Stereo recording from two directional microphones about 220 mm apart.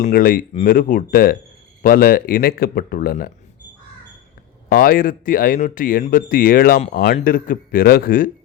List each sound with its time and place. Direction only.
0.0 s speech: 40° left (ahead or behind)
4.7 s speech: 40° left (ahead or behind)